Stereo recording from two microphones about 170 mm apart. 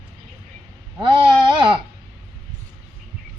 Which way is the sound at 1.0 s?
30° right (ahead or behind).